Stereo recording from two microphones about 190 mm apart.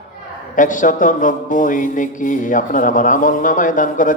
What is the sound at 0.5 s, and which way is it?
A man's voice, 45° left (ahead or behind).